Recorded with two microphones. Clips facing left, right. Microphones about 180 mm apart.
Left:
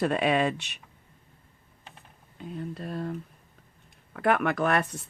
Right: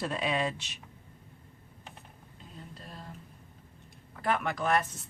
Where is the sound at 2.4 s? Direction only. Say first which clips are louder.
Left 13 dB; 65° left (ahead or behind).